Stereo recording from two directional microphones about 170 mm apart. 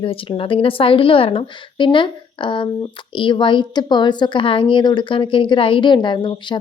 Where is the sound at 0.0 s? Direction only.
30° left (ahead or behind).